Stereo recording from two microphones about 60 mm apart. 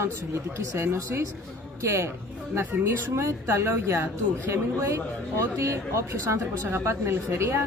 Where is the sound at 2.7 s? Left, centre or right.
Right.